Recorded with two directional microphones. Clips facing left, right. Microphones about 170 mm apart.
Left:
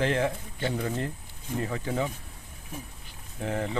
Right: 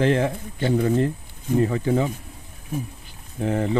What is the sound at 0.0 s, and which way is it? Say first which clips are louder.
Speech: right 6 dB; 40° right (ahead or behind).